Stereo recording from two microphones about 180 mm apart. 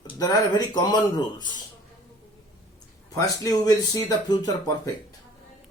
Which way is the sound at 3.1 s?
20° left (ahead or behind).